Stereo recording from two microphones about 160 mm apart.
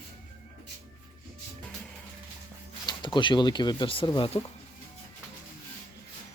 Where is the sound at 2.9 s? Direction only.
30° left (ahead or behind).